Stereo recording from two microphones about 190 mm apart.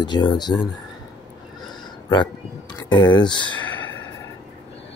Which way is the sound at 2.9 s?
25° left (ahead or behind).